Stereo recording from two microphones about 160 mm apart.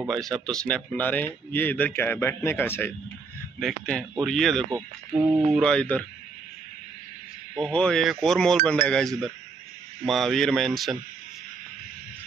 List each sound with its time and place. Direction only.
0.1 s speech: 5° left (ahead or behind)
3.5 s speech: centre (ahead or behind)
4.6 s speech: 25° right (ahead or behind)
5.5 s speech: 5° left (ahead or behind)
7.5 s speech: 5° left (ahead or behind)